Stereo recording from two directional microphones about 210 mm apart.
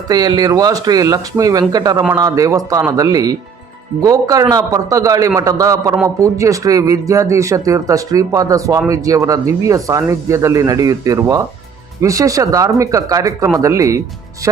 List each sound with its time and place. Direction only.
0.1 s speech: 20° right (ahead or behind)